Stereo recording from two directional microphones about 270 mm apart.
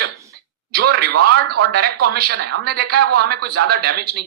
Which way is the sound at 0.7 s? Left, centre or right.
Right.